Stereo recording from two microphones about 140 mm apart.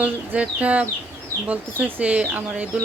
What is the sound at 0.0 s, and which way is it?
Speech, 10° right (ahead or behind).